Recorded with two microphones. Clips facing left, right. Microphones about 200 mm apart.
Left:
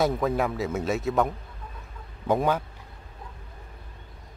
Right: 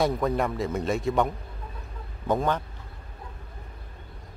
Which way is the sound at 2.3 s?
10° left (ahead or behind).